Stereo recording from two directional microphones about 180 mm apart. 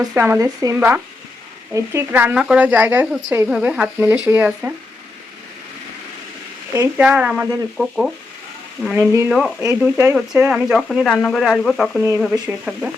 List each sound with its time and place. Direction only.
0.0 s speech: 15° right (ahead or behind)
6.7 s speech: 10° right (ahead or behind)
12.7 s speech: 10° right (ahead or behind)